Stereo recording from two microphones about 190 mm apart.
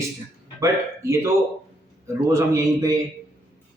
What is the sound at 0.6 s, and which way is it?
Speech, 15° right (ahead or behind).